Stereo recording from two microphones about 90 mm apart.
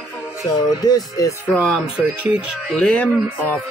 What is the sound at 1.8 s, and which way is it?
Speech, 15° right (ahead or behind).